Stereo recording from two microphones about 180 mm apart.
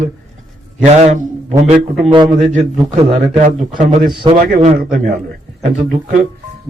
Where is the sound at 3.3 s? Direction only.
45° right (ahead or behind).